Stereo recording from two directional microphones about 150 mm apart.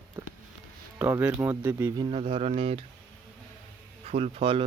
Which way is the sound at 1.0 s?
10° right (ahead or behind).